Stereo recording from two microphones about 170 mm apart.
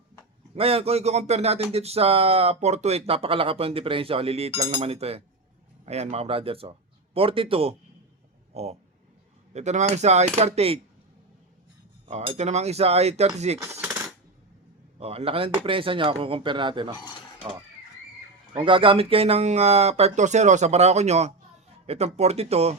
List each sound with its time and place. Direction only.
0.5 s speech: 35° right (ahead or behind)
12.0 s speech: 40° right (ahead or behind)
14.9 s speech: 35° right (ahead or behind)
18.5 s speech: 30° right (ahead or behind)